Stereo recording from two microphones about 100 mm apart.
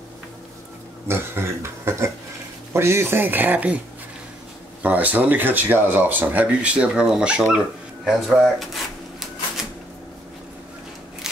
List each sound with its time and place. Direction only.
1.0 s a sound: 25° right (ahead or behind)
2.7 s speech: 25° right (ahead or behind)
4.8 s speech: 15° right (ahead or behind)
8.0 s speech: centre (ahead or behind)